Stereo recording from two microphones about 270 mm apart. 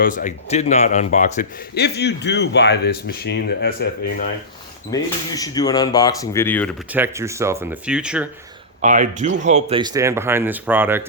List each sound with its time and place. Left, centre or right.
0.0 s a man's voice: left
4.9 s speech: centre
6.9 s speech: centre
8.8 s speech: right; by 11.0 s centre